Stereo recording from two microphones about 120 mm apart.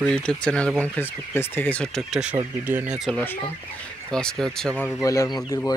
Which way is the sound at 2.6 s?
15° right (ahead or behind).